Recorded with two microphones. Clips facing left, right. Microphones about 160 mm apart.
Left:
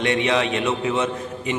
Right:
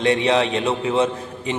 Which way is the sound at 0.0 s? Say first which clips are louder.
Right 3 dB; 30° right (ahead or behind).